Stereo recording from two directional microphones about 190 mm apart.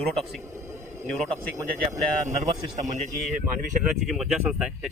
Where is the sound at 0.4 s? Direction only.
15° right (ahead or behind).